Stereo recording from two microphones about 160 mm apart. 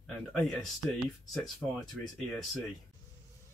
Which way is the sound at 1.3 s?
Centre (ahead or behind).